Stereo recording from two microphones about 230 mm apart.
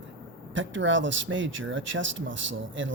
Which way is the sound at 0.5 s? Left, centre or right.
Right.